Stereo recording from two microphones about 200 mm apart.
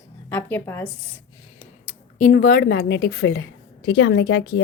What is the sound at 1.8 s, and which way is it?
A woman's voice, 35° left (ahead or behind).